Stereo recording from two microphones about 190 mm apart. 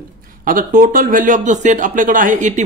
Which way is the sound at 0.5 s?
45° right (ahead or behind).